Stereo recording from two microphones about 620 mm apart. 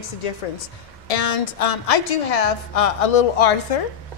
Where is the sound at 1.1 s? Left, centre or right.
Left.